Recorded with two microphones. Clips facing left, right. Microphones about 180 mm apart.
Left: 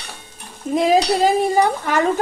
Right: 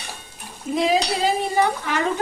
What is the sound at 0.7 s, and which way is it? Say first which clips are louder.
Dishes: left 5 dB; 45° left (ahead or behind).